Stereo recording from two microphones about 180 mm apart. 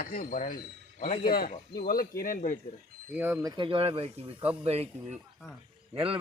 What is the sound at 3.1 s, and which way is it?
Speech, 10° right (ahead or behind).